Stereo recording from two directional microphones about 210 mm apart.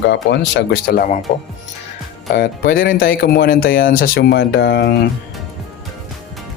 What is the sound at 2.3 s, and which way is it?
Speech, 45° left (ahead or behind).